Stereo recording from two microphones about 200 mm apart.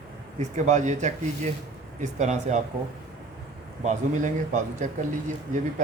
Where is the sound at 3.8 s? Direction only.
35° right (ahead or behind).